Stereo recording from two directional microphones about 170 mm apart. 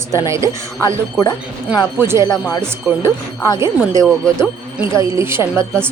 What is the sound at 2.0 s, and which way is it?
Speech, 15° right (ahead or behind).